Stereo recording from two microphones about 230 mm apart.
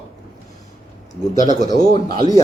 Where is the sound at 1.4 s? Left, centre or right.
Left.